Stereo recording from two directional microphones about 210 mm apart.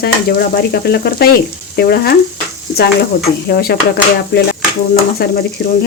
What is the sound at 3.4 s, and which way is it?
Speech, 50° left (ahead or behind).